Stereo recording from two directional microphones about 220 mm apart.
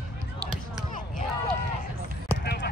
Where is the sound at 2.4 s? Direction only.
45° left (ahead or behind).